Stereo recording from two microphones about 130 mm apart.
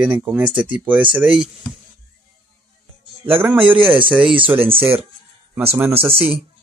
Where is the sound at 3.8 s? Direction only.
40° right (ahead or behind).